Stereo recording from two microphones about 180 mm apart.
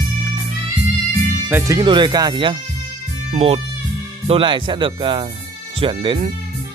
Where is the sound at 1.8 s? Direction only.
25° right (ahead or behind).